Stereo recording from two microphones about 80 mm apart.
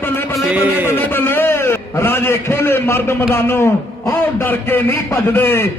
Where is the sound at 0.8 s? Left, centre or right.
Left.